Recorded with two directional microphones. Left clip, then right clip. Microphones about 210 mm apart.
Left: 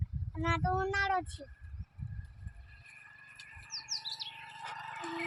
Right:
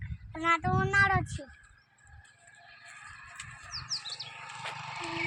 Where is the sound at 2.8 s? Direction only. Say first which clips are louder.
Right 5 dB; 45° right (ahead or behind).